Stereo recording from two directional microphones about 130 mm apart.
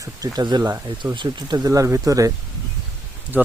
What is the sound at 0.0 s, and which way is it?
Speech, 30° right (ahead or behind).